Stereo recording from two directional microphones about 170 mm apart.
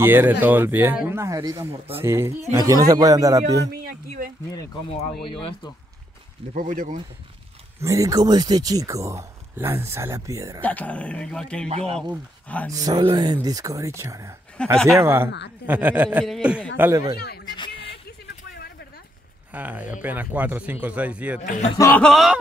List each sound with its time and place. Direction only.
0.0 s speech: 10° right (ahead or behind)
3.7 s speech: 60° right (ahead or behind)
5.2 s speech: 30° left (ahead or behind)
6.5 s speech: 50° right (ahead or behind)
7.8 s speech: 20° right (ahead or behind)
10.6 s speech: 10° left (ahead or behind)
12.7 s speech: 25° right (ahead or behind)
14.6 s a sound: 5° left (ahead or behind)
15.0 s speech: 15° right (ahead or behind)
17.6 s music: 30° left (ahead or behind)
19.5 s speech: 10° right (ahead or behind)
21.5 s speech: 40° left (ahead or behind)
21.7 s speech: 20° left (ahead or behind)
22.0 s a sound: centre (ahead or behind)